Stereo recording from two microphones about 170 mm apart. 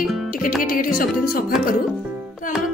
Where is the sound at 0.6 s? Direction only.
55° left (ahead or behind).